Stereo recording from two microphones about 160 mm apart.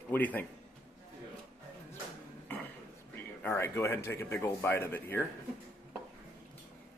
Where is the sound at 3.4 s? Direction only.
15° left (ahead or behind).